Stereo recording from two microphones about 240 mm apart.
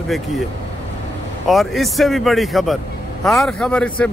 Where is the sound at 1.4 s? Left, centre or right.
Centre.